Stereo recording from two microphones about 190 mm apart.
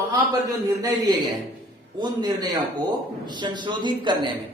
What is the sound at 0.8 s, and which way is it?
Speech, 20° right (ahead or behind).